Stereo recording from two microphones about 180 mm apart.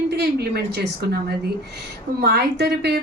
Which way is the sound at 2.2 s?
65° right (ahead or behind).